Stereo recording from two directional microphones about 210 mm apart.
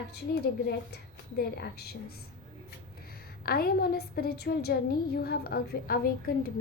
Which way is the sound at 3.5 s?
45° left (ahead or behind).